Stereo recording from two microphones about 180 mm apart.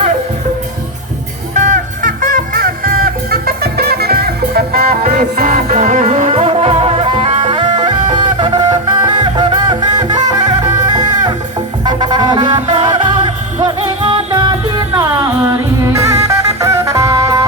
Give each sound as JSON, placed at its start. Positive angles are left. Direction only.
{"t": 1.5, "sound": "music", "side_deg": -45}